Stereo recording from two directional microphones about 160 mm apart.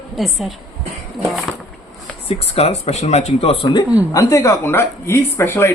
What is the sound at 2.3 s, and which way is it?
Speech, 40° left (ahead or behind).